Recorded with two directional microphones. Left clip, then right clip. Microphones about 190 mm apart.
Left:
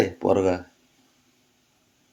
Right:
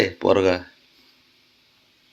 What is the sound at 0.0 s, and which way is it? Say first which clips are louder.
Speech: right 3 dB; 5° left (ahead or behind).